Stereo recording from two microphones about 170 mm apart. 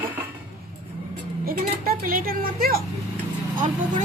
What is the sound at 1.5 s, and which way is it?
Speech, 55° right (ahead or behind).